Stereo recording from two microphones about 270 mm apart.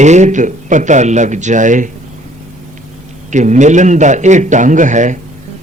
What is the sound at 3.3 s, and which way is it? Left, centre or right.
Speech, right.